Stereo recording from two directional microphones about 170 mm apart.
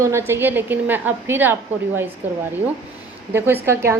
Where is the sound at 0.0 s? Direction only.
15° right (ahead or behind).